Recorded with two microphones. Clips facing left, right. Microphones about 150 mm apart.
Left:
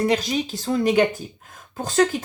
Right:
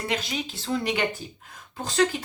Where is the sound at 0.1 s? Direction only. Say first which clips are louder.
Left 7 dB; 40° left (ahead or behind).